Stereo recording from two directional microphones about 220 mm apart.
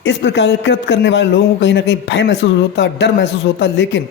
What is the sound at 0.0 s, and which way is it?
Speech, 55° left (ahead or behind).